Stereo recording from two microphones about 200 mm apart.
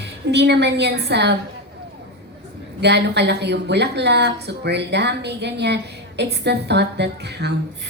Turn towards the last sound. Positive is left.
turn(degrees=-55)  # may be behind; listen again after turning